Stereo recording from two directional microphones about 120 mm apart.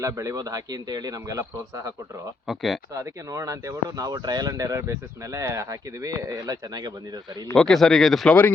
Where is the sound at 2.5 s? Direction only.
Centre (ahead or behind).